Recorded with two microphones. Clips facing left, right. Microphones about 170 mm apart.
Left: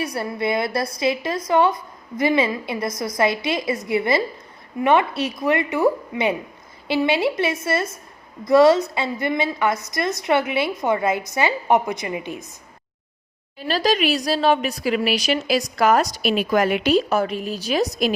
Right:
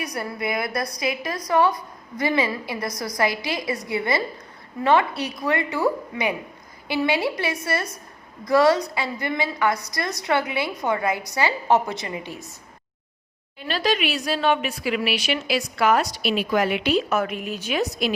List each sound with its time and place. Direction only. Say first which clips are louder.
0.0 s a woman's voice: left 4 dB; 30° left (ahead or behind)
13.6 s speech: left 3 dB; 40° left (ahead or behind)